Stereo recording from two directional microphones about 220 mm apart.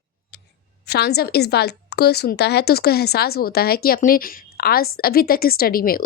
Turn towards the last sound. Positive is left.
turn(degrees=40)  # may be behind; listen again after turning